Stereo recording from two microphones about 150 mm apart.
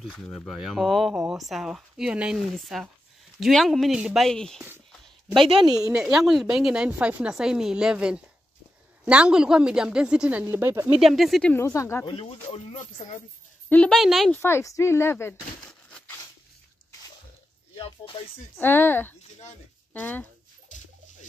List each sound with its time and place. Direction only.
0.1 s speech: 5° left (ahead or behind)
5.4 s a woman's voice: 35° right (ahead or behind)
5.8 s speech: 5° right (ahead or behind)
10.4 s speech: 15° right (ahead or behind)
11.0 s speech: centre (ahead or behind)
11.5 s speech: 20° left (ahead or behind)
12.2 s speech: 45° left (ahead or behind)
13.7 s speech: 5° left (ahead or behind)
14.4 s a woman's voice: 20° left (ahead or behind)
17.7 s music: 35° left (ahead or behind)
18.6 s a woman's voice: 15° left (ahead or behind)